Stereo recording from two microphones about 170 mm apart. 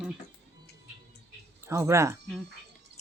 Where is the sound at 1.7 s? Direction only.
15° right (ahead or behind).